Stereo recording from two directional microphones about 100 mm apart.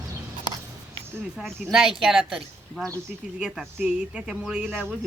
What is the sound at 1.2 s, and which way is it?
Speech, 5° right (ahead or behind).